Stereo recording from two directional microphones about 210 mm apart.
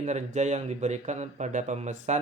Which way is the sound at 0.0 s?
35° right (ahead or behind).